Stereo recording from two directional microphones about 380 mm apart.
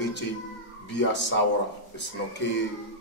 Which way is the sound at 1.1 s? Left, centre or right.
Left.